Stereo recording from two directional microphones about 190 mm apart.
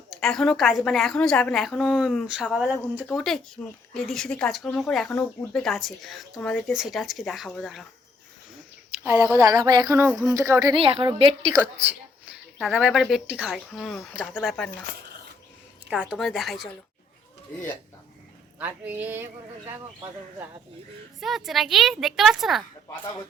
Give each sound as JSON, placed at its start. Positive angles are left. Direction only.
{"t": 0.2, "sound": "speech", "side_deg": 0}
{"t": 9.0, "sound": "speech", "side_deg": -10}
{"t": 10.8, "sound": "speech", "side_deg": -30}
{"t": 12.3, "sound": "speech", "side_deg": -5}
{"t": 15.9, "sound": "speech", "side_deg": -5}
{"t": 18.6, "sound": "speech", "side_deg": -10}
{"t": 21.2, "sound": "speech", "side_deg": 0}